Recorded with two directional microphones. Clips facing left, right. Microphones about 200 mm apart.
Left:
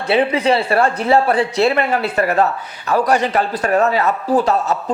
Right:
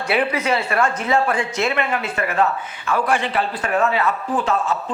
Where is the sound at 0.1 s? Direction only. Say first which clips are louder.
Left 5 dB; 30° left (ahead or behind).